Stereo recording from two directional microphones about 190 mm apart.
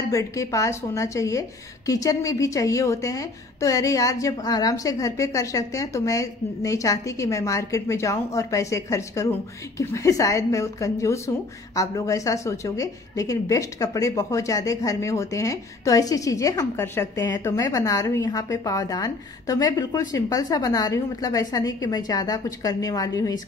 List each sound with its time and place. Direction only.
0.1 s a woman's voice: 15° left (ahead or behind)